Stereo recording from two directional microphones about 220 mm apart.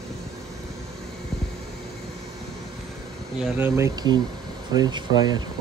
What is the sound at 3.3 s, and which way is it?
Speech, 5° right (ahead or behind).